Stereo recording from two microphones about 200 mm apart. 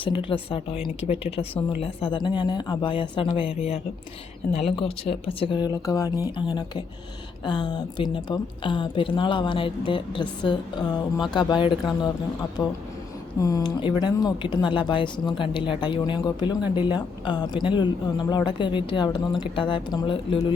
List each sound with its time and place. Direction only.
0.0 s speech: 25° left (ahead or behind)